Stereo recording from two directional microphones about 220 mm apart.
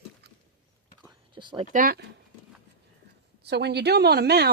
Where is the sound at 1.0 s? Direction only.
20° right (ahead or behind).